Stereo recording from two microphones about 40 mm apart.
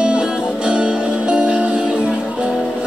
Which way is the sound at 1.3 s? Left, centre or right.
Right.